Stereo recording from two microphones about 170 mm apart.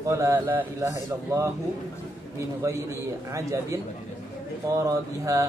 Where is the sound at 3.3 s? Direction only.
20° right (ahead or behind).